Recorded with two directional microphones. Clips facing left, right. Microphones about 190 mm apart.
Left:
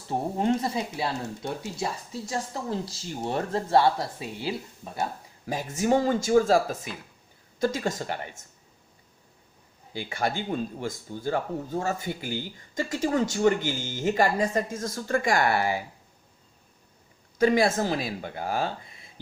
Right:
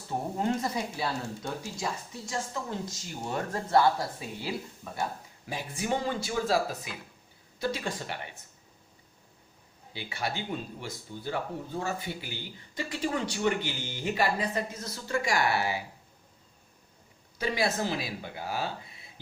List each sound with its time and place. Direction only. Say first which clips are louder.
0.1 s speech: left 4 dB; 25° left (ahead or behind)
2.3 s speech: left 3 dB; 35° left (ahead or behind)
5.5 s speech: left 7 dB; 45° left (ahead or behind)
9.9 s speech: left 6 dB; 50° left (ahead or behind)
17.3 s speech: left 8 dB; 50° left (ahead or behind)